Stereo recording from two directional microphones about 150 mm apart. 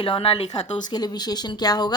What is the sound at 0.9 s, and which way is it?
Speech, 25° left (ahead or behind).